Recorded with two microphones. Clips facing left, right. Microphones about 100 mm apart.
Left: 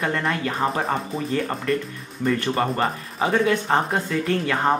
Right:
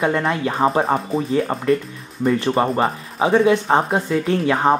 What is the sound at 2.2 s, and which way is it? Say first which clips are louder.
Speech: right 4 dB; 10° right (ahead or behind).